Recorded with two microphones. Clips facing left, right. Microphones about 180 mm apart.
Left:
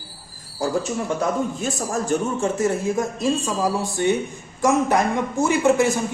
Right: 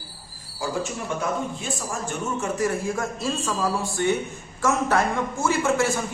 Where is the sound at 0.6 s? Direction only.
40° left (ahead or behind).